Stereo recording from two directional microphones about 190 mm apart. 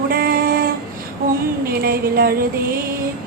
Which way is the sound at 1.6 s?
50° right (ahead or behind).